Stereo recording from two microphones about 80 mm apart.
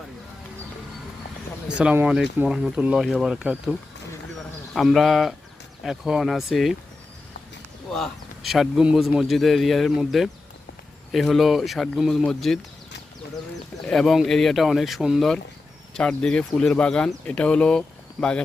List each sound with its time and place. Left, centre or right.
1.6 s speech: centre
4.7 s speech: centre
7.9 s speech: centre
13.8 s speech: centre
16.0 s speech: centre